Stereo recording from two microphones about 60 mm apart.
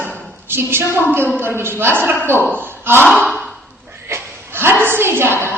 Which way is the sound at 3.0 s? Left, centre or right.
Centre.